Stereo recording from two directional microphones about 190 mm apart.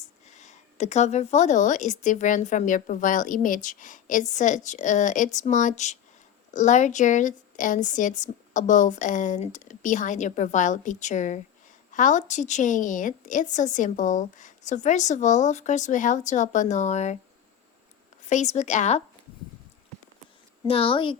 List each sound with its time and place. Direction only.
0.3 s speech: 40° left (ahead or behind)
18.3 s speech: 40° left (ahead or behind)
20.7 s a woman's voice: 30° left (ahead or behind)